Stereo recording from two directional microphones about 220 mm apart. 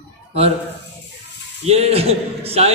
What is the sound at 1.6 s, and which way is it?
A man's voice, 30° right (ahead or behind).